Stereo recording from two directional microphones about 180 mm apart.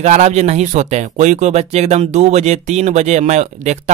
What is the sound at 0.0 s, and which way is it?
Speech, 40° right (ahead or behind).